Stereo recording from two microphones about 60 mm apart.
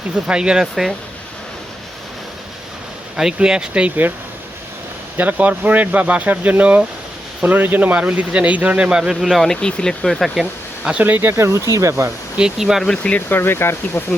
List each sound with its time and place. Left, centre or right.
0.3 s speech: centre
3.2 s speech: centre
5.1 s speech: right; by 9.5 s centre
9.5 s speech: centre
11.0 s speech: right
11.3 s speech: right
12.4 s speech: centre
12.8 s speech: centre
13.1 s speech: left